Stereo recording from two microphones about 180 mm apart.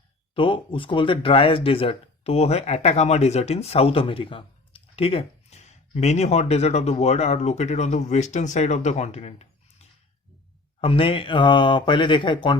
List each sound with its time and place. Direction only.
0.3 s speech: 30° left (ahead or behind)